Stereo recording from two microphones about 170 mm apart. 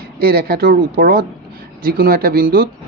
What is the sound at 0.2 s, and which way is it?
Speech, 60° right (ahead or behind).